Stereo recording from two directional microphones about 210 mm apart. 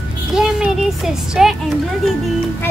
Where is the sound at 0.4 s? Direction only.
5° right (ahead or behind).